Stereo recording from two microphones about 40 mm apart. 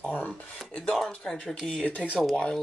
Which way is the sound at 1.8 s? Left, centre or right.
Left.